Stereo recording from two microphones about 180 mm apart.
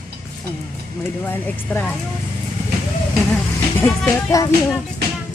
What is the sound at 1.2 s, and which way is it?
Speech, 10° left (ahead or behind).